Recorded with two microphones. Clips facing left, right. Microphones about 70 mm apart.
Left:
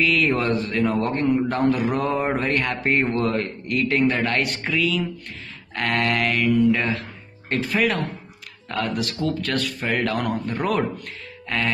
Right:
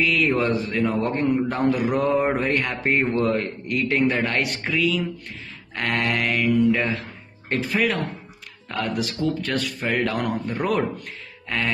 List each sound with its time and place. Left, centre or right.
0.0 s a man's voice: centre
4.4 s a man's voice: centre
8.6 s a man's voice: centre
11.4 s music: centre